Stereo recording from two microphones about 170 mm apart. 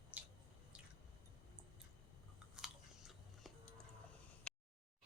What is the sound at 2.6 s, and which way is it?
Biting, 5° right (ahead or behind).